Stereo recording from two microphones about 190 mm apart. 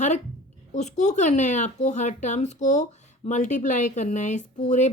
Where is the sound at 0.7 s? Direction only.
40° left (ahead or behind).